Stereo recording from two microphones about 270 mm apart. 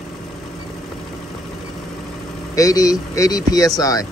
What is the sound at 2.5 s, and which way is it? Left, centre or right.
Speech, centre.